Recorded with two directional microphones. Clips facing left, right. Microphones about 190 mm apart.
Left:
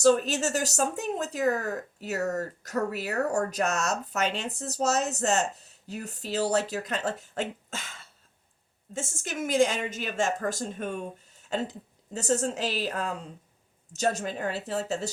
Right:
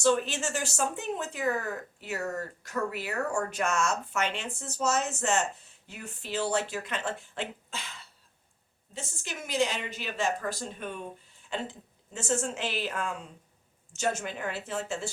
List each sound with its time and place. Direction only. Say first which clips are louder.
0.0 s a woman's voice: left 4 dB; 40° left (ahead or behind)